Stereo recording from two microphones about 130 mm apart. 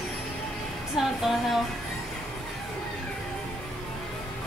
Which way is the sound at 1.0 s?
5° right (ahead or behind).